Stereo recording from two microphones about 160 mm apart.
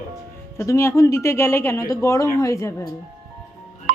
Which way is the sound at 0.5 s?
20° left (ahead or behind).